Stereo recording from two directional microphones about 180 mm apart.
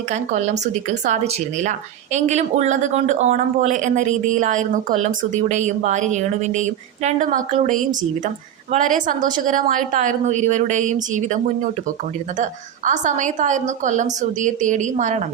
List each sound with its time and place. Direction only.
0.1 s speech: 40° right (ahead or behind)